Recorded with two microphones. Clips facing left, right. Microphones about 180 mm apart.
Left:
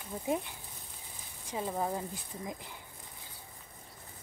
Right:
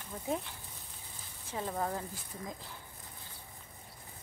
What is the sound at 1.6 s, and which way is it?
Speech, 10° left (ahead or behind).